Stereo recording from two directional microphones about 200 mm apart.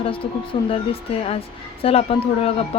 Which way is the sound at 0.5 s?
25° left (ahead or behind).